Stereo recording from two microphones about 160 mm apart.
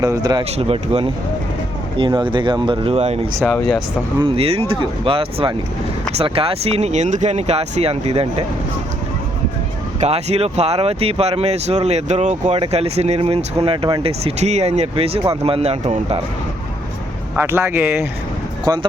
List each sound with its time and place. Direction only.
0.0 s speech: 25° right (ahead or behind)
0.5 s speech: 40° right (ahead or behind)
3.5 s speech: centre (ahead or behind)
4.2 s speech: 35° right (ahead or behind)
10.0 s speech: 40° right (ahead or behind)
17.3 s speech: 15° right (ahead or behind)
18.6 s speech: 25° right (ahead or behind)